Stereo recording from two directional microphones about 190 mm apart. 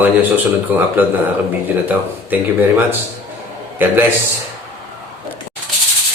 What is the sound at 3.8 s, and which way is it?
Speech, 10° right (ahead or behind).